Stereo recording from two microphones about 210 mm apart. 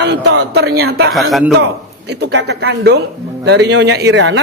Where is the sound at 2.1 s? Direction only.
55° right (ahead or behind).